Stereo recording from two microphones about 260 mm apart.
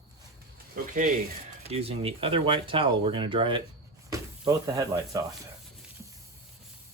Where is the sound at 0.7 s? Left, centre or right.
Right; by 5.5 s centre.